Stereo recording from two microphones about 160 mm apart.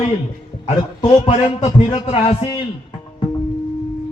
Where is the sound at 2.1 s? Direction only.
40° left (ahead or behind).